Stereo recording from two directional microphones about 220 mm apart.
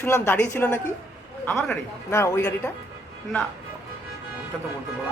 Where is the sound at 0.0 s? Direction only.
10° left (ahead or behind).